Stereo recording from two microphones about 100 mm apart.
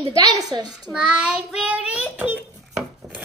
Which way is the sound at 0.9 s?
10° right (ahead or behind).